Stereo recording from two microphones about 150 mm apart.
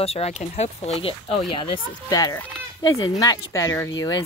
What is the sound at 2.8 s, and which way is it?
Speech, 25° left (ahead or behind).